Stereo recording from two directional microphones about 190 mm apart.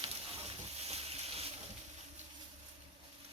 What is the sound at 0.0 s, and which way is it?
Boat, 30° right (ahead or behind).